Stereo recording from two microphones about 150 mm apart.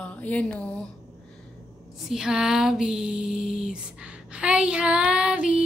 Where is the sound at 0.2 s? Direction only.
10° left (ahead or behind).